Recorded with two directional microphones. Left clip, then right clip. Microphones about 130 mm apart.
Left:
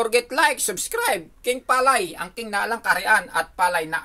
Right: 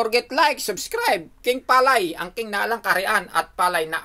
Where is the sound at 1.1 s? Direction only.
45° right (ahead or behind).